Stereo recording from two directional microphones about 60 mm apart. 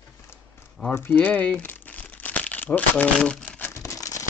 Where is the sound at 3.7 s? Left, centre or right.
Left.